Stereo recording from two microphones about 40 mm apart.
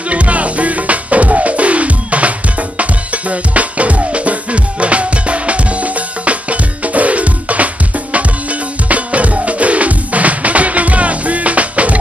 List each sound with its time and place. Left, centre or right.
0.1 s music: right